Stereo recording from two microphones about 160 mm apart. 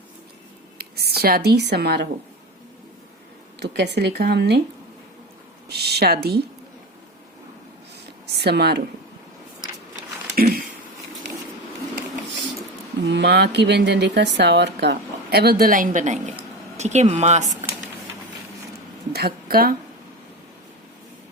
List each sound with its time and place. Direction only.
0.8 s speech: 80° right
3.6 s speech: 90° right
5.6 s speech: 90° right
8.4 s speech: 90° right
10.3 s a sound: 65° right (ahead or behind)
13.1 s speech: 90° right; by 17.7 s 45° right (ahead or behind)
19.1 s a woman's voice: 75° right (ahead or behind)